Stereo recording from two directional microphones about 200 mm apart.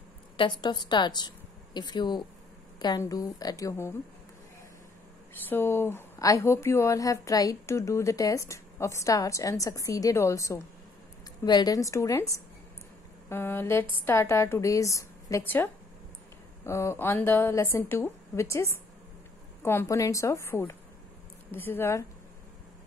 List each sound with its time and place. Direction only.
0.4 s a woman's voice: 20° left (ahead or behind)
5.5 s speech: 10° left (ahead or behind)
13.3 s speech: 10° left (ahead or behind)